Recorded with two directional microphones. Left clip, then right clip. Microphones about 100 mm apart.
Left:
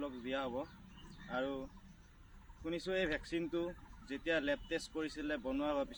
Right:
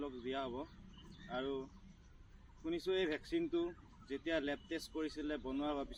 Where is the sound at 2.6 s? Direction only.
40° left (ahead or behind).